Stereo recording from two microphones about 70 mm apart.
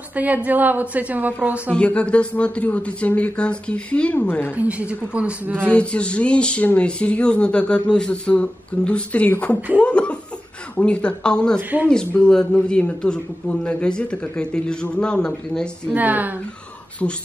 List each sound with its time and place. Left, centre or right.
0.1 s a woman's voice: right
1.7 s speech: centre
4.6 s a woman's voice: centre
5.7 s speech: centre
15.9 s a woman's voice: right
17.0 s speech: left